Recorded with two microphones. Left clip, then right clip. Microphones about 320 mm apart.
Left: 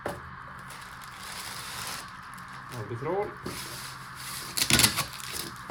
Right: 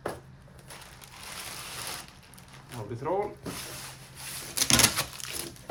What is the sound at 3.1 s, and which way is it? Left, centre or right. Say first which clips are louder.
Speech: right 1 dB; right.